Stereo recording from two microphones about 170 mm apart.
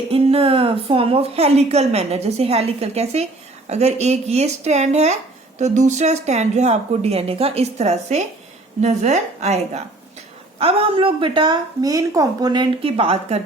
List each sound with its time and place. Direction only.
0.1 s a woman's voice: 35° right (ahead or behind)